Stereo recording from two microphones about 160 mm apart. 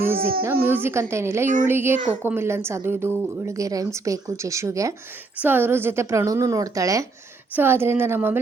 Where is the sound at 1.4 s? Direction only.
55° right (ahead or behind).